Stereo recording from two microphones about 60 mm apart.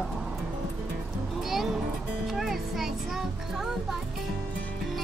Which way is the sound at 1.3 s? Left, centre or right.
Centre.